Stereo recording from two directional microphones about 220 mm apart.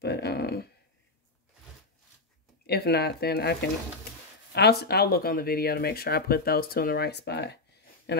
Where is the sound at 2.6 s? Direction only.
45° left (ahead or behind).